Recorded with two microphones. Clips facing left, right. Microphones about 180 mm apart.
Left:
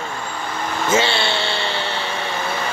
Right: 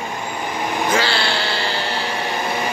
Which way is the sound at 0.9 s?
25° left (ahead or behind).